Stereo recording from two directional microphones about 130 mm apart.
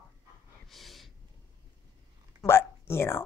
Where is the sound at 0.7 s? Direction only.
Centre (ahead or behind).